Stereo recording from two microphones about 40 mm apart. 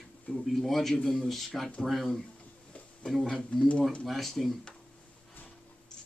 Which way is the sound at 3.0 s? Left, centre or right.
Left.